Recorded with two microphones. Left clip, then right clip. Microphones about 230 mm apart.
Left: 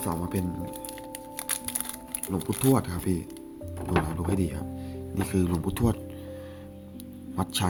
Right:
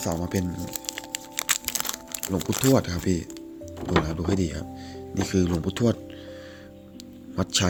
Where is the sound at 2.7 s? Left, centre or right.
Centre.